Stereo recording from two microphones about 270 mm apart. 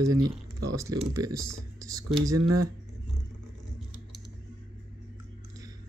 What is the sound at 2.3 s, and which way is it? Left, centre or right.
Speech, right.